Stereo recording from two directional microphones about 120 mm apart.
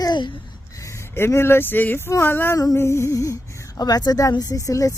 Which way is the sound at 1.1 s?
20° left (ahead or behind).